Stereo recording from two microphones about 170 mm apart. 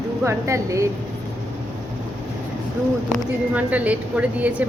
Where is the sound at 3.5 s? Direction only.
10° right (ahead or behind).